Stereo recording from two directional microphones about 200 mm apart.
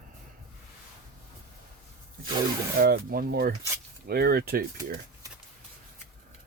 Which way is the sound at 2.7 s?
50° right (ahead or behind).